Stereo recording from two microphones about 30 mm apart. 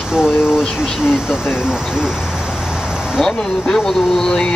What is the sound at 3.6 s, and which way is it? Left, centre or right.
Speech, centre.